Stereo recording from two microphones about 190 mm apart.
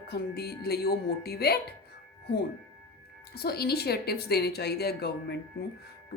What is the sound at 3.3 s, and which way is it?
Speech, 55° left (ahead or behind).